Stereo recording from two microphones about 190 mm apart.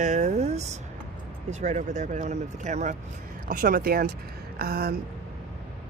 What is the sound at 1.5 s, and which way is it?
Speech, 40° right (ahead or behind).